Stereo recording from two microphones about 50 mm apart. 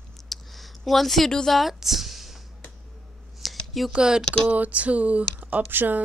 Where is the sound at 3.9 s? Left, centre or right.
Centre.